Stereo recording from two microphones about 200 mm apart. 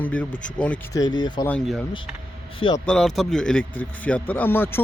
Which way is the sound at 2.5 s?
25° left (ahead or behind).